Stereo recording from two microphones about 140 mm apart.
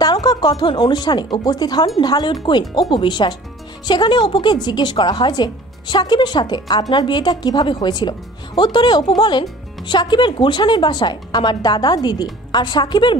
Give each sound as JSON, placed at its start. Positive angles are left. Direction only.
{"t": 0.0, "sound": "a woman's voice", "side_deg": 30}